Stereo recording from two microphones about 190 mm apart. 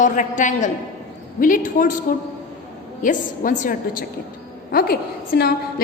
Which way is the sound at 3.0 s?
45° left (ahead or behind).